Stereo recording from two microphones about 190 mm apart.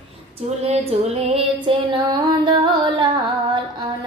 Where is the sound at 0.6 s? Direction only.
30° right (ahead or behind).